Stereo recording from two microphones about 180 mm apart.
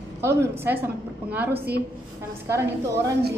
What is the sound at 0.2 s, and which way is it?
Speech, 15° right (ahead or behind).